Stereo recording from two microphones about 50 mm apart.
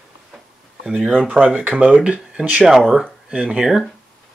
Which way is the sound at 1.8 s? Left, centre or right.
Right.